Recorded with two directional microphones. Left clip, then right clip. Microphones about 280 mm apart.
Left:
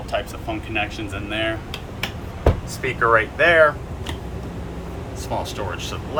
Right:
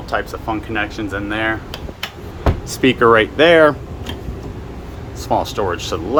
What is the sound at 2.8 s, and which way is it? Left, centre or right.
Speech, right.